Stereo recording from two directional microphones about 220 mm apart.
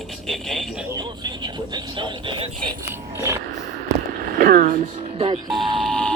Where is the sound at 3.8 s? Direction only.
40° right (ahead or behind); by 5.4 s 25° right (ahead or behind).